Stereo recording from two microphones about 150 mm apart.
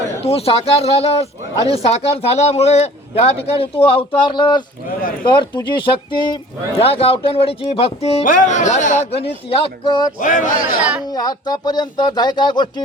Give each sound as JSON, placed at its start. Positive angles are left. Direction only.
{"t": 0.2, "sound": "speech", "side_deg": 40}
{"t": 8.2, "sound": "speech", "side_deg": 60}
{"t": 10.2, "sound": "speech", "side_deg": 60}
{"t": 11.1, "sound": "speech", "side_deg": 25}